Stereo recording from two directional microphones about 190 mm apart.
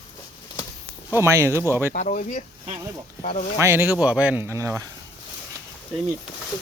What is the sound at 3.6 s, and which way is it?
Speech, 10° right (ahead or behind).